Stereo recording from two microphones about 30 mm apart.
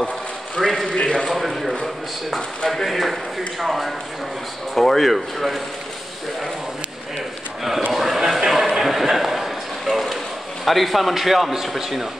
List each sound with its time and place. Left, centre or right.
0.6 s a man's voice: centre
0.8 s a man's voice: left
1.3 s speech: centre
2.8 s speech: centre
7.9 s a sound: centre
10.6 s speech: centre